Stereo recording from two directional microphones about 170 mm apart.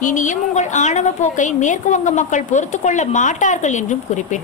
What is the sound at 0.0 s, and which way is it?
A woman's voice, 50° left (ahead or behind).